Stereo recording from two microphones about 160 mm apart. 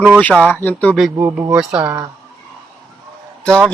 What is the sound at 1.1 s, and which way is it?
Speech, 15° right (ahead or behind).